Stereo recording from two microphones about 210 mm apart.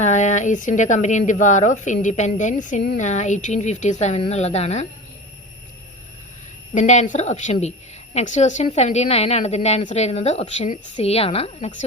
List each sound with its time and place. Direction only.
0.0 s a woman's voice: 35° left (ahead or behind)
6.7 s a woman's voice: 35° left (ahead or behind)